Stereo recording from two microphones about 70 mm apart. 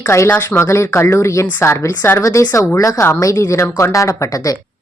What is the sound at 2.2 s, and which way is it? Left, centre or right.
Speech, left.